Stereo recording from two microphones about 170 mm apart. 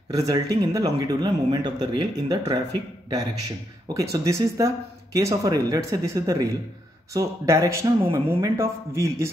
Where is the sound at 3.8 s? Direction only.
20° right (ahead or behind).